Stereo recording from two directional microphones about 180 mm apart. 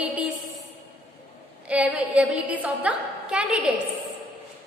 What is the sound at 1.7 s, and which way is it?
A woman's voice, 10° right (ahead or behind).